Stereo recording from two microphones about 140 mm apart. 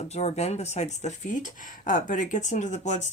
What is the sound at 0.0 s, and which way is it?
Speech, 50° left (ahead or behind).